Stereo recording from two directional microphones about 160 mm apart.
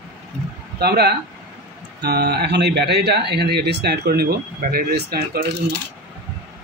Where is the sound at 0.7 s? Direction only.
90° right.